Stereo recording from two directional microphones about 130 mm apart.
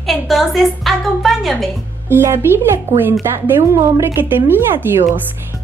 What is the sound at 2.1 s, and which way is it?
Speech, 20° right (ahead or behind).